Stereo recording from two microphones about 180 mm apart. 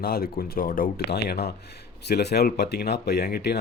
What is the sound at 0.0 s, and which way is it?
Speech, 55° left (ahead or behind).